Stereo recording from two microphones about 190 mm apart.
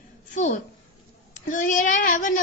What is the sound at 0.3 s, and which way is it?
A woman's voice, 40° left (ahead or behind).